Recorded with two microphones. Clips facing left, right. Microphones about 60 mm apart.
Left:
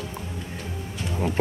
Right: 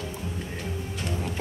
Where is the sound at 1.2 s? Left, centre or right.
Left.